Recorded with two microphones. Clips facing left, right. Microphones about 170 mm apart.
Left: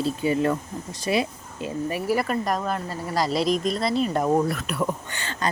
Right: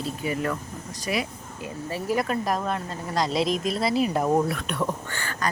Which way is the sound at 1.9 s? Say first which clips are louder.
Even; 10° left (ahead or behind).